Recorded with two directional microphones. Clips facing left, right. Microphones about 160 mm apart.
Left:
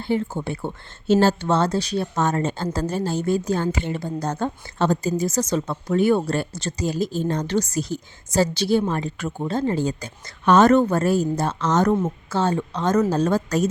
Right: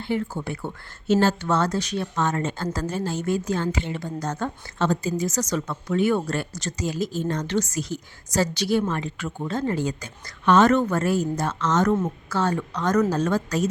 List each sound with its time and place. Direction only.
0.0 s a woman's voice: 30° left (ahead or behind)